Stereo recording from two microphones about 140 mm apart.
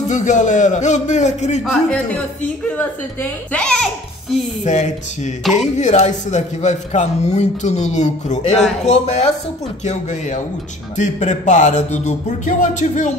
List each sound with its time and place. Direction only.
0.1 s a man's voice: 60° left (ahead or behind)
1.7 s a man's voice: 5° left (ahead or behind)
4.6 s a man's voice: 55° left (ahead or behind)
11.0 s a man's voice: 60° left (ahead or behind)